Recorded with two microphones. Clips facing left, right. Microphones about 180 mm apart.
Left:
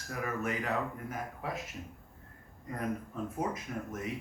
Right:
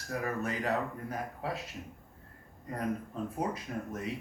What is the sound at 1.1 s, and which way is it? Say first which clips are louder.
Speech: right 2 dB; 30° right (ahead or behind).